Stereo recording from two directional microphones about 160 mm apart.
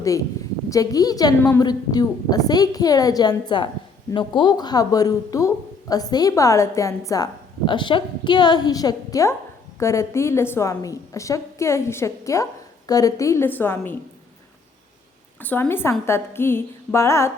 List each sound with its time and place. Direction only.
0.7 s a woman's voice: 20° left (ahead or behind)
15.4 s a woman's voice: 10° left (ahead or behind)